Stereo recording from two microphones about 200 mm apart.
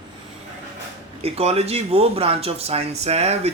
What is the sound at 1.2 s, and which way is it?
Speech, 30° right (ahead or behind).